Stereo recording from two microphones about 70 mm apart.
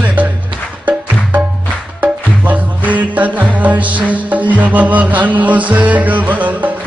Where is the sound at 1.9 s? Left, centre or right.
Right.